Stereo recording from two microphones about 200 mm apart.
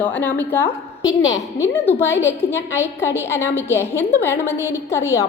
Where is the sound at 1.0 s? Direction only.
70° left (ahead or behind).